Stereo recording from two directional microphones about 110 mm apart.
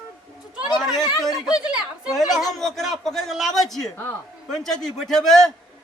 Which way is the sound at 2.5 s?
Centre (ahead or behind).